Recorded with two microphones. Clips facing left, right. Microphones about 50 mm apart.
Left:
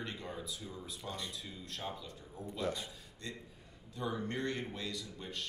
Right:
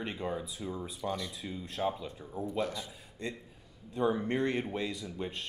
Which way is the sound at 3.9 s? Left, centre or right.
Right.